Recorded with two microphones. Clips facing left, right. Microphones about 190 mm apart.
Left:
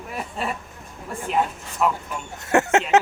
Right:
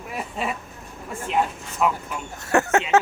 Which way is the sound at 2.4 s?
20° left (ahead or behind).